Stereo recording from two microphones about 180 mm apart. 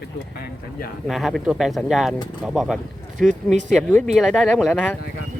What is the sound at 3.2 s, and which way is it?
Speech, 45° right (ahead or behind).